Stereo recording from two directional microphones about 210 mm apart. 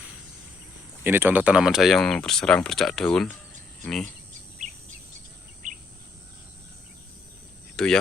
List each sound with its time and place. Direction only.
1.0 s speech: 10° right (ahead or behind)
5.6 s insect: 40° right (ahead or behind)
7.8 s speech: 5° left (ahead or behind)